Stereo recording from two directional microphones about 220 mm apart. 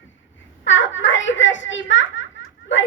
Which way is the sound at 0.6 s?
55° left (ahead or behind).